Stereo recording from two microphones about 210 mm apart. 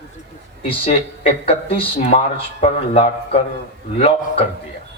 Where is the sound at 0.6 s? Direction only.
25° left (ahead or behind).